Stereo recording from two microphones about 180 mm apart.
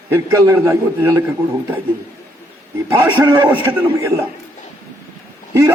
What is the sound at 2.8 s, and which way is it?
Speech, 10° right (ahead or behind).